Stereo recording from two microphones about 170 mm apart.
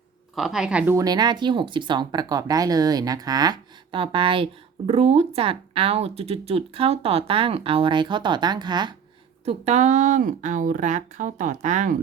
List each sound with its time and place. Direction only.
0.3 s a woman's voice: 5° right (ahead or behind)
0.9 s speech: 25° right (ahead or behind)
9.4 s speech: 40° right (ahead or behind)